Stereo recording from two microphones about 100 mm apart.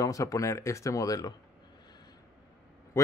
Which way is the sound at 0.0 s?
35° left (ahead or behind).